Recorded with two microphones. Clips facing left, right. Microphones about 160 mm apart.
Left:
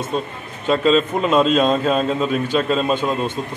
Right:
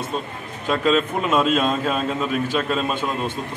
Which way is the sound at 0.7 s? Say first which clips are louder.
Left 4 dB; 5° right (ahead or behind).